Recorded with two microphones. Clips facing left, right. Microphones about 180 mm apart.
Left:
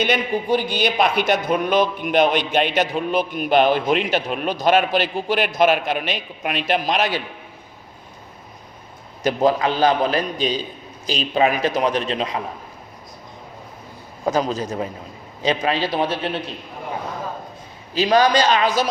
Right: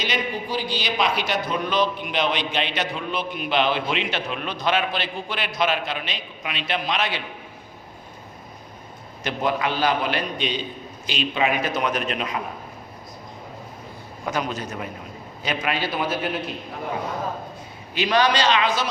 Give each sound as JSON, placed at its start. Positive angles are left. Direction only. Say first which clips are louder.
{"t": 0.0, "sound": "speech", "louder": "left 6 dB", "side_deg": 55}
{"t": 9.2, "sound": "a man's voice", "louder": "left 6 dB", "side_deg": 35}
{"t": 14.3, "sound": "a man's voice", "louder": "left 6 dB", "side_deg": 35}
{"t": 17.9, "sound": "speech", "louder": "left 4 dB", "side_deg": 40}